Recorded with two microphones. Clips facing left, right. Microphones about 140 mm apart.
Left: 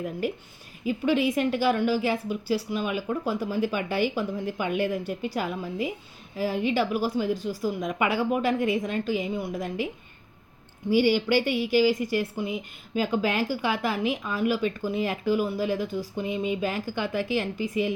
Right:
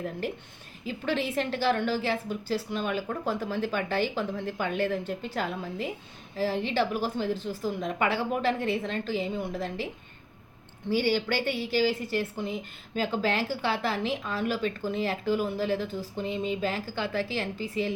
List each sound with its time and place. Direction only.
0.9 s speech: 10° left (ahead or behind)